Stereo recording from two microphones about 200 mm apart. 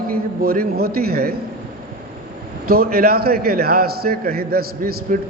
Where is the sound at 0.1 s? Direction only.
45° right (ahead or behind).